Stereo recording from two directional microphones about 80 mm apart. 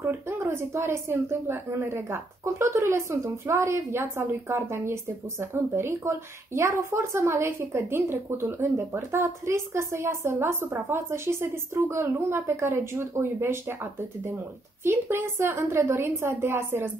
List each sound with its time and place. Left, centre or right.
0.0 s a woman's voice: right
14.8 s a woman's voice: right